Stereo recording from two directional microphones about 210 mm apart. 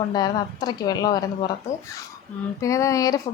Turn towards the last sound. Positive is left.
turn(degrees=15)  # may be behind; listen again after turning